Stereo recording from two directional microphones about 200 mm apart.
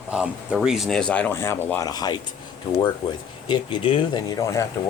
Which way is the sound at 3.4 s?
25° left (ahead or behind).